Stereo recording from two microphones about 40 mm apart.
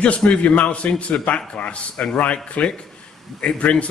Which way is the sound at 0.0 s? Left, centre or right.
Left.